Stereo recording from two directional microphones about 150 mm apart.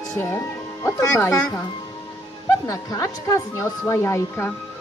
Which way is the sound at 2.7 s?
20° left (ahead or behind).